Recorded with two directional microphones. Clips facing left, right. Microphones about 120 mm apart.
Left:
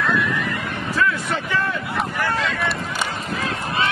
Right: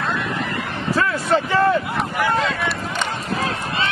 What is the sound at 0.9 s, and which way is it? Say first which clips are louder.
Vehicle: right 4 dB; 35° right (ahead or behind).